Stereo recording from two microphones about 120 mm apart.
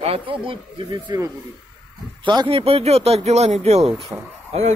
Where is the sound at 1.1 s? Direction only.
30° right (ahead or behind).